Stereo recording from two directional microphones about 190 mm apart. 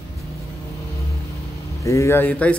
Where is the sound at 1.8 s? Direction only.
15° left (ahead or behind).